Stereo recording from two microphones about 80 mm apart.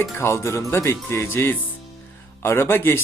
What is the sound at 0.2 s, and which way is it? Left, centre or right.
Speech, left.